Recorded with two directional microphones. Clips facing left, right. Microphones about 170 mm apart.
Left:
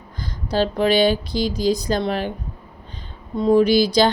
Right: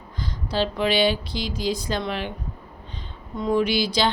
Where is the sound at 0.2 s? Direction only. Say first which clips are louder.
Left 4 dB; 45° left (ahead or behind).